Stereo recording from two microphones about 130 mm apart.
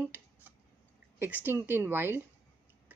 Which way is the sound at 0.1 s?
15° right (ahead or behind).